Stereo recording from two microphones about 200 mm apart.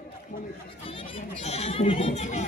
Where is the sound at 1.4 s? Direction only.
30° left (ahead or behind).